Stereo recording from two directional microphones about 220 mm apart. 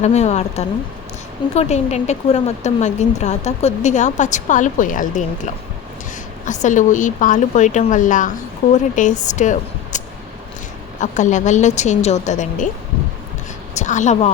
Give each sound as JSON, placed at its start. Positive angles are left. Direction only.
{"t": 0.0, "sound": "speech", "side_deg": 30}
{"t": 11.0, "sound": "speech", "side_deg": 35}
{"t": 13.7, "sound": "speech", "side_deg": 35}